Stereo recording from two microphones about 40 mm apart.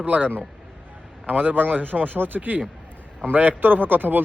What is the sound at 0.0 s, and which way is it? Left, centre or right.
Speech, right.